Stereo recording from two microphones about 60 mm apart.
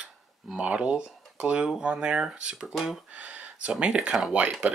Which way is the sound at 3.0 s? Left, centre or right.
Right.